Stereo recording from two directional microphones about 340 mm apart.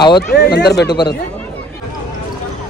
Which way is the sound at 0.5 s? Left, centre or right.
Left.